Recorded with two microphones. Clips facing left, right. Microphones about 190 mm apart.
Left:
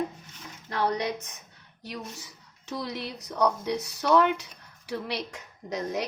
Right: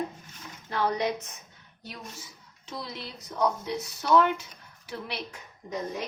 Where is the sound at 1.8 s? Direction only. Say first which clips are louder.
Left 4 dB; 70° left (ahead or behind).